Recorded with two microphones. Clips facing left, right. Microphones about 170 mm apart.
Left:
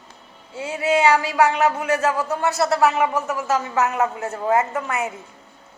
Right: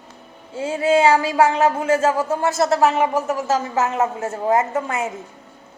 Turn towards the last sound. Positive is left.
turn(degrees=-25)  # may be behind; listen again after turning